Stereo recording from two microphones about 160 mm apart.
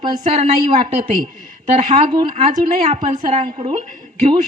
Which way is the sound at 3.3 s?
40° right (ahead or behind).